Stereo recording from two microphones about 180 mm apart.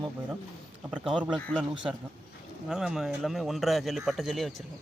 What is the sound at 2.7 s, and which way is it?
Speech, 5° right (ahead or behind).